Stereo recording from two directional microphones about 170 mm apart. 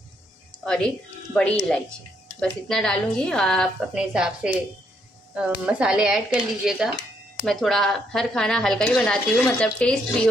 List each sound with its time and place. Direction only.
0.7 s a woman's voice: 5° left (ahead or behind)